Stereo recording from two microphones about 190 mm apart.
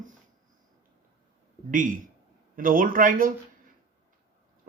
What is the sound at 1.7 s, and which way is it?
Speech, 45° right (ahead or behind).